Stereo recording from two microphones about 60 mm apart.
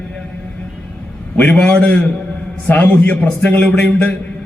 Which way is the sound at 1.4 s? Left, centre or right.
Left.